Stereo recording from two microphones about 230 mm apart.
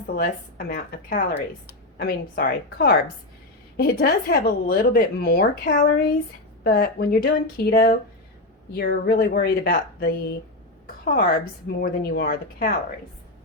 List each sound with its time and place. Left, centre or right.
0.2 s a woman's voice: left
10.8 s a sound: left
11.8 s a woman's voice: left